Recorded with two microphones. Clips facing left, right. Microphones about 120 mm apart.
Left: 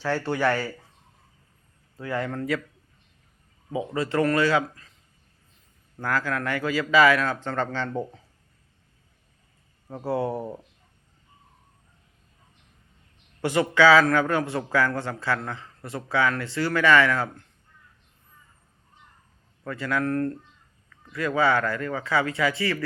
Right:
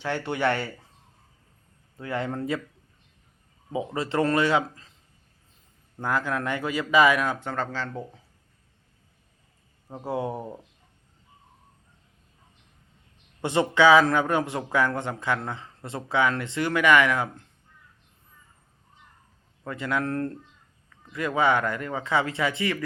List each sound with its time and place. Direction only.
0.0 s a man's voice: 20° right (ahead or behind)
2.0 s a man's voice: 25° right (ahead or behind)
3.7 s a man's voice: 25° right (ahead or behind)
6.0 s a man's voice: 20° right (ahead or behind)
9.9 s speech: 15° right (ahead or behind)
13.4 s a man's voice: 20° right (ahead or behind)
19.6 s a man's voice: 20° right (ahead or behind)